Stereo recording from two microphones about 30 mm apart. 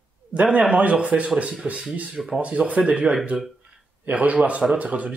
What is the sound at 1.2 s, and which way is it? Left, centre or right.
Speech, right.